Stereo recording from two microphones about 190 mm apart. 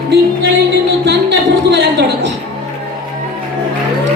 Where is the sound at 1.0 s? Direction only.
65° right (ahead or behind).